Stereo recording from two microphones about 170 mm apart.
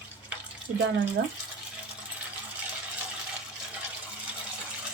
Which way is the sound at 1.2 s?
90° right.